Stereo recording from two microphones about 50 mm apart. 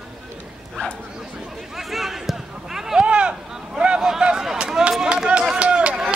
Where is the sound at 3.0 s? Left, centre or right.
Right.